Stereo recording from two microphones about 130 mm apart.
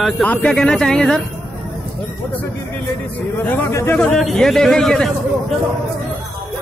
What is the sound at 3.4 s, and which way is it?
Speech, 15° left (ahead or behind).